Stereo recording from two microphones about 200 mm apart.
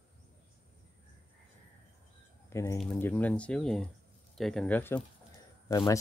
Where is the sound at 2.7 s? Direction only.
5° left (ahead or behind).